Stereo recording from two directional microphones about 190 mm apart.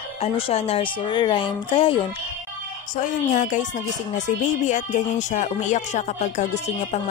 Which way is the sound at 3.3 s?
40° left (ahead or behind).